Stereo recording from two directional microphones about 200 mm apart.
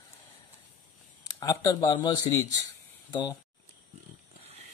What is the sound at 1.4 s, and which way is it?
Speech, 15° left (ahead or behind).